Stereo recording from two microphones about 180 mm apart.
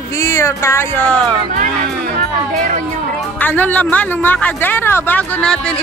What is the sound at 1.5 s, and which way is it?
Music, 50° right (ahead or behind).